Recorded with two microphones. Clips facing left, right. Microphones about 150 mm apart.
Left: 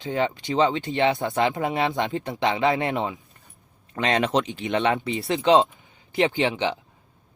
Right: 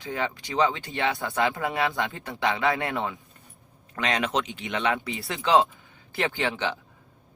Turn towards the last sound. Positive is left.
turn(degrees=20)  # may be behind; listen again after turning